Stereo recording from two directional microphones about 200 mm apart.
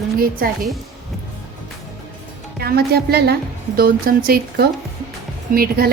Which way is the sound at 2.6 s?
50° right (ahead or behind).